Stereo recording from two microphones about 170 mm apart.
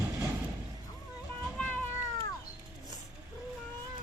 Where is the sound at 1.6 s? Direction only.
10° left (ahead or behind).